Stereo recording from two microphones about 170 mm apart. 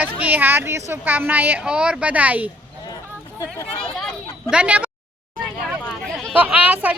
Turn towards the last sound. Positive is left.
turn(degrees=-10)  # may be behind; listen again after turning